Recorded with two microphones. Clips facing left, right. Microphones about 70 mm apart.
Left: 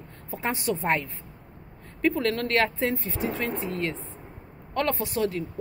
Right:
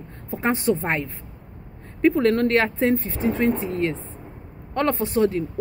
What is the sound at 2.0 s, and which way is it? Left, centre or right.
A woman's voice, right.